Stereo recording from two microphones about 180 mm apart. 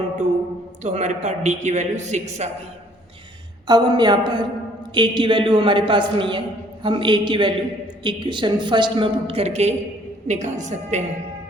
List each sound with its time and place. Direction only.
0.8 s a woman's voice: 40° right (ahead or behind)
3.7 s a man's voice: 25° right (ahead or behind); by 11.0 s 40° right (ahead or behind)